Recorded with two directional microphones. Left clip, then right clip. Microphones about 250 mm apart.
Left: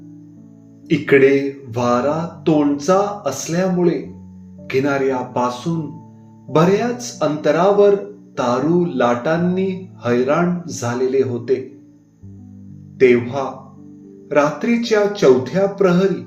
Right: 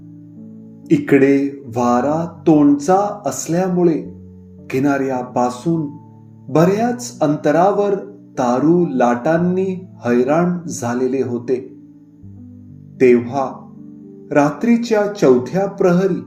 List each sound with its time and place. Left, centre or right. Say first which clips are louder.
0.9 s speech: even; right
7.2 s speech: right 2 dB; right
13.0 s speech: right 1 dB; right